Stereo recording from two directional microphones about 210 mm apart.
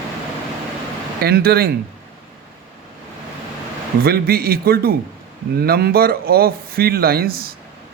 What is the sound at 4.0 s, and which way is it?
A man's voice, 45° right (ahead or behind).